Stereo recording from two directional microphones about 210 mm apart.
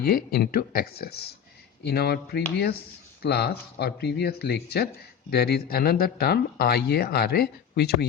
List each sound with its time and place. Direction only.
0.0 s speech: 45° left (ahead or behind)